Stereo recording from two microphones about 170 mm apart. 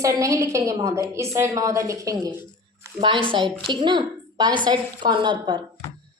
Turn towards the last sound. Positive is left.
turn(degrees=-25)  # may be behind; listen again after turning